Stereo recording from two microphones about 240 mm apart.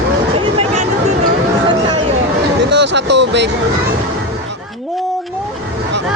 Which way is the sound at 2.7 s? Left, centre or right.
Right.